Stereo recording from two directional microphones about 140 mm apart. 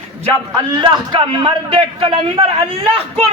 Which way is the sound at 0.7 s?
35° right (ahead or behind).